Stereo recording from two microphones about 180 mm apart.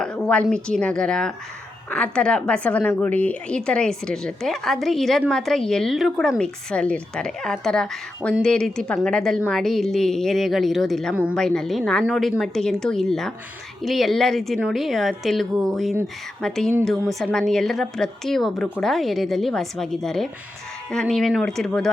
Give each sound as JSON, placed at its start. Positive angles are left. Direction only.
{"t": 0.0, "sound": "a woman's voice", "side_deg": 5}
{"t": 11.3, "sound": "speech", "side_deg": 5}